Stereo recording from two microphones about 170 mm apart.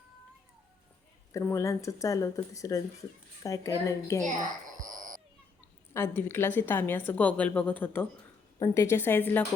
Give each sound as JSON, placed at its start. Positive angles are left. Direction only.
{"t": 1.3, "sound": "a woman's voice", "side_deg": 15}
{"t": 4.8, "sound": "a sound", "side_deg": -50}
{"t": 5.9, "sound": "a woman's voice", "side_deg": 15}